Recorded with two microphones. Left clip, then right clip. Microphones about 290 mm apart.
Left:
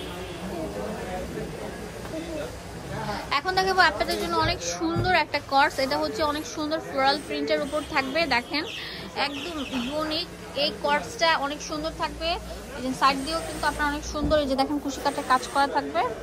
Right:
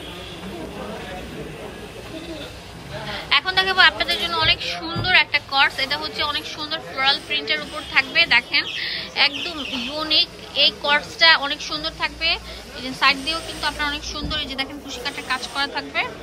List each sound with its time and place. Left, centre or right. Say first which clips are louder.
3.3 s speech: right 6 dB; centre